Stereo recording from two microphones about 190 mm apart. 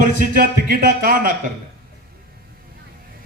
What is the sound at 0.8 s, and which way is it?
Speech, 45° right (ahead or behind).